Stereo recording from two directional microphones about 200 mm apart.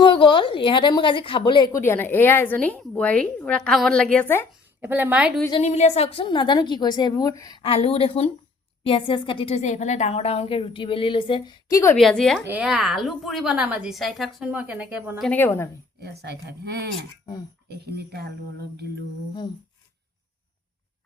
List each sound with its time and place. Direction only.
0.0 s a woman's voice: 25° left (ahead or behind); by 4.4 s 10° left (ahead or behind)
4.8 s a woman's voice: 10° right (ahead or behind)
5.5 s a woman's voice: 30° left (ahead or behind); by 11.9 s 15° left (ahead or behind)
11.9 s a woman's voice: centre (ahead or behind)
15.2 s a woman's voice: 10° left (ahead or behind)
16.0 s speech: 55° right (ahead or behind)